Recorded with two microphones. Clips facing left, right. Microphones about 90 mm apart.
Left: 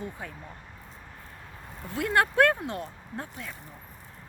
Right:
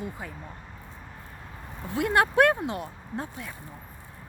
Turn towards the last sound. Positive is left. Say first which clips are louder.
# right 3 dB
turn(degrees=-20)  # may be behind; listen again after turning